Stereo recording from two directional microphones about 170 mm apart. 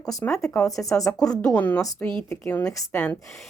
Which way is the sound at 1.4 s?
5° left (ahead or behind).